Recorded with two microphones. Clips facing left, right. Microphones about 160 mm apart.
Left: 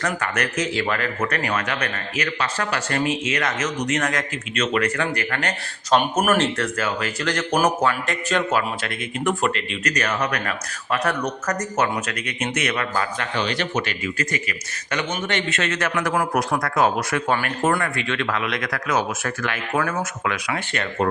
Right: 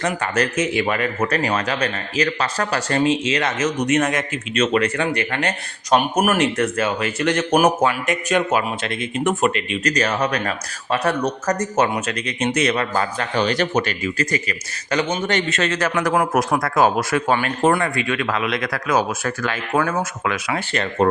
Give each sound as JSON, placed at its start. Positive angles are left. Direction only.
{"t": 0.0, "sound": "a man's voice", "side_deg": -25}
{"t": 5.9, "sound": "speech", "side_deg": -10}
{"t": 9.8, "sound": "speech", "side_deg": -30}
{"t": 16.3, "sound": "a man's voice", "side_deg": -20}